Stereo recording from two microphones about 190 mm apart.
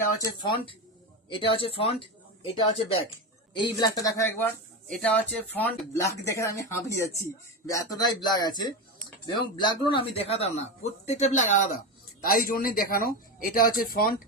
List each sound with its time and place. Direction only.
0.2 s speech: 25° left (ahead or behind)
4.9 s speech: 5° left (ahead or behind); by 14.2 s 50° left (ahead or behind)